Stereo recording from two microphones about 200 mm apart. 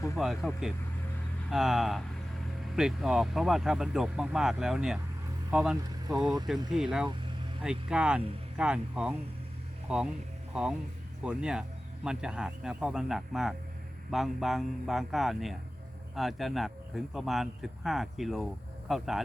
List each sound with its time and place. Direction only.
0.2 s speech: centre (ahead or behind)